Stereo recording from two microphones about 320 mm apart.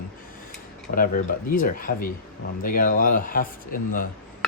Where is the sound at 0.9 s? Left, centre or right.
Left.